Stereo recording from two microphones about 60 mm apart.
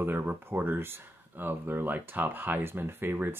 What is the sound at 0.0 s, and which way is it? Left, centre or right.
Speech, right.